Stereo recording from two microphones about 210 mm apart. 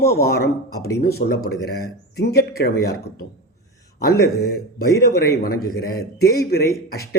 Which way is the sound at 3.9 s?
50° left (ahead or behind).